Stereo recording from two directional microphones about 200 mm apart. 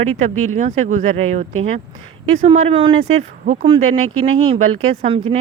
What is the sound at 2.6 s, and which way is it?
Speech, 30° right (ahead or behind).